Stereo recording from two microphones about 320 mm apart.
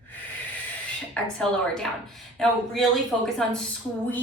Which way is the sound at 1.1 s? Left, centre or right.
Centre.